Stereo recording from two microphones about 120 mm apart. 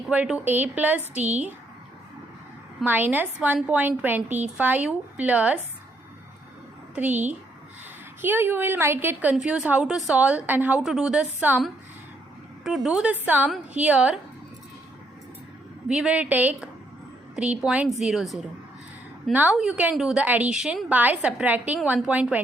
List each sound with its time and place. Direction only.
0.1 s a woman's voice: 10° right (ahead or behind)
1.1 s a woman's voice: 70° right (ahead or behind)
2.8 s a woman's voice: 15° right (ahead or behind)
6.9 s a woman's voice: 15° right (ahead or behind)
8.2 s a woman's voice: 15° right (ahead or behind)
9.3 s a woman's voice: 5° right (ahead or behind)
10.8 s a woman's voice: 5° right (ahead or behind)
12.6 s a woman's voice: 5° right (ahead or behind)
15.9 s a woman's voice: 5° right (ahead or behind)
19.3 s a woman's voice: 15° right (ahead or behind)